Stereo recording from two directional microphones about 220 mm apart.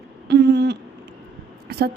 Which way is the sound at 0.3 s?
50° right (ahead or behind).